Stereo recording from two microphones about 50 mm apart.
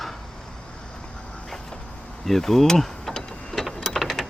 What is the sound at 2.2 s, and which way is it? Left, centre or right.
Vehicle, centre.